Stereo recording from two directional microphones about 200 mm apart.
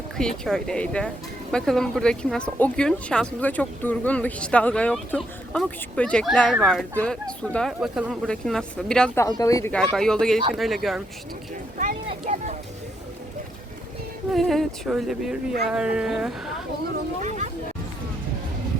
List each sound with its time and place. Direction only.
0.2 s speech: 5° left (ahead or behind)
9.2 s speech: 15° left (ahead or behind)
9.7 s speech: 5° left (ahead or behind)
11.8 s speech: 40° right (ahead or behind)
14.3 s speech: centre (ahead or behind)
17.2 s speech: 35° right (ahead or behind)